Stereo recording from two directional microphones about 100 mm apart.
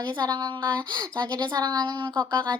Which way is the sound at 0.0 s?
45° right (ahead or behind).